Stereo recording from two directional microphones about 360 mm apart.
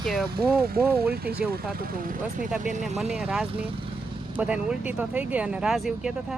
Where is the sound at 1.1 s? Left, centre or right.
Right.